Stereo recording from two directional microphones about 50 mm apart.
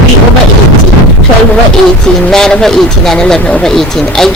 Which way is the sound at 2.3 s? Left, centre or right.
Centre.